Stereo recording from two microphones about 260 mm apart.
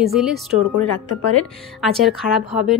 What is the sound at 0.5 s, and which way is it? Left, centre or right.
Speech, left.